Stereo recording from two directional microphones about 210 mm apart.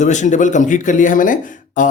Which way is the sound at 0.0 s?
35° left (ahead or behind).